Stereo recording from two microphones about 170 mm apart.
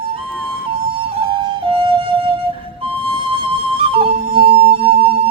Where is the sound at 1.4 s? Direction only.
30° right (ahead or behind).